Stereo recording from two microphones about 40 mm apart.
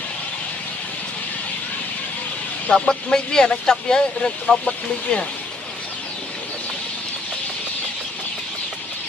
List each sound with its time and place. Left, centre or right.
2.9 s speech: centre